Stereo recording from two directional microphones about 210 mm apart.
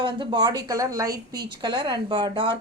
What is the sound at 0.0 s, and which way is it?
Speech, 20° right (ahead or behind).